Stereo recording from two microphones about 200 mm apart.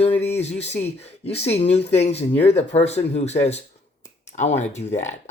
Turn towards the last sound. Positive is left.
turn(degrees=35)  # may be behind; listen again after turning